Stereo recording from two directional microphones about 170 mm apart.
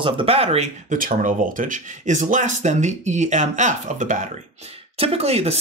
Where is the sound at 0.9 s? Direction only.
55° right (ahead or behind).